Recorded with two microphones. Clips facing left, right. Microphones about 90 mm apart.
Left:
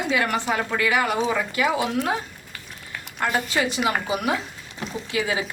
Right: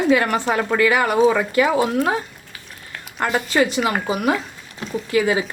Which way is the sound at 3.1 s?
60° right (ahead or behind).